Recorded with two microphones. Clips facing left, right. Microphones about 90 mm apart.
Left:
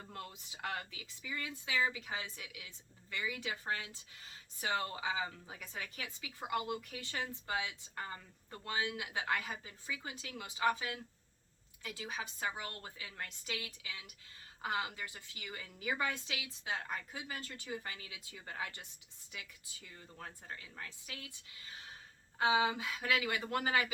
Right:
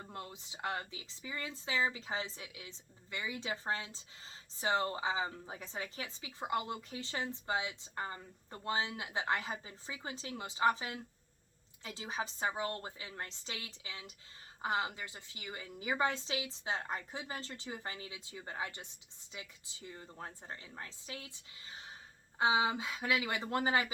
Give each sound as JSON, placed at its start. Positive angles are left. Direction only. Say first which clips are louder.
{"t": 0.0, "sound": "a woman's voice", "louder": "right 2 dB", "side_deg": -25}